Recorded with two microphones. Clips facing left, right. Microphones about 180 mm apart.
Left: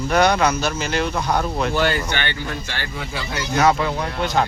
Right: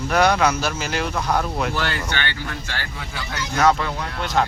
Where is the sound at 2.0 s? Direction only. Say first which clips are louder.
Left 2 dB; 20° left (ahead or behind).